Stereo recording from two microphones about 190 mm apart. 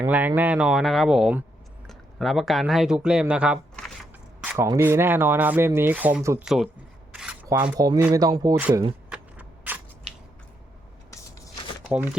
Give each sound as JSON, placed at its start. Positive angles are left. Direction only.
{"t": 0.0, "sound": "speech", "side_deg": -10}
{"t": 4.4, "sound": "speech", "side_deg": -15}
{"t": 6.4, "sound": "speech", "side_deg": 0}
{"t": 7.1, "sound": "rub", "side_deg": -5}
{"t": 7.4, "sound": "speech", "side_deg": -15}
{"t": 8.5, "sound": "speech", "side_deg": -10}
{"t": 9.0, "sound": "a sound", "side_deg": -5}
{"t": 11.9, "sound": "speech", "side_deg": -10}